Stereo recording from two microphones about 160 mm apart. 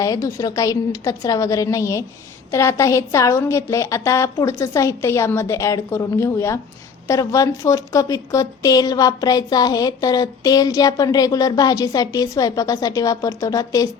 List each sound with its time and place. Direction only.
0.0 s a woman's voice: 20° left (ahead or behind)